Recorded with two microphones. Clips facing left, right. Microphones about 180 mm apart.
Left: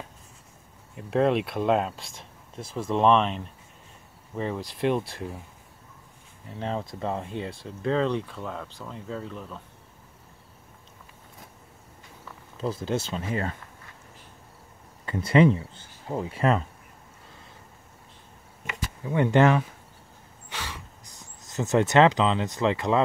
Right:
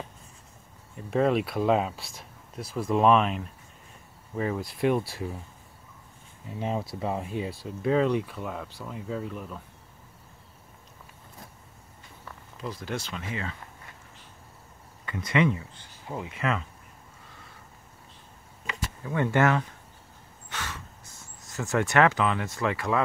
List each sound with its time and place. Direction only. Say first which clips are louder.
0.9 s speech: left 1 dB; centre (ahead or behind)
6.6 s speech: even; 10° right (ahead or behind)
12.5 s speech: left 6 dB; 30° left (ahead or behind)
13.3 s speech: left 6 dB; 40° left (ahead or behind)
15.0 s speech: left 5 dB; 30° left (ahead or behind)
19.0 s speech: left 4 dB; 20° left (ahead or behind)
20.4 s gasp: even; 10° left (ahead or behind)